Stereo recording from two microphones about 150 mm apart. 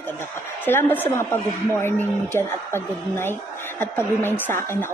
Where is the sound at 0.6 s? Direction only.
15° left (ahead or behind).